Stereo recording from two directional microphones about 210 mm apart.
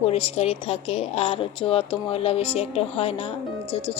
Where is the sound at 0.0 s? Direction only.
25° left (ahead or behind).